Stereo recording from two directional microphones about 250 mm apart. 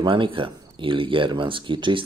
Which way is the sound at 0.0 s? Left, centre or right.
Centre.